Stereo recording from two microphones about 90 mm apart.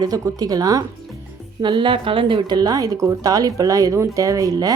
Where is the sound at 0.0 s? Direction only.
40° right (ahead or behind).